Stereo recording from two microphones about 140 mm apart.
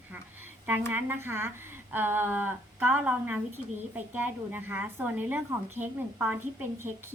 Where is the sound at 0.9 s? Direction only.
15° right (ahead or behind).